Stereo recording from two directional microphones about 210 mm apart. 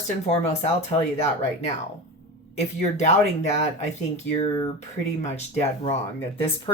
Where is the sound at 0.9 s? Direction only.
25° left (ahead or behind).